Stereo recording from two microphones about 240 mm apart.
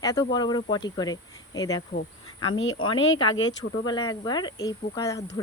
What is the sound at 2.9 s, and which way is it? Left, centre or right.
Speech, left.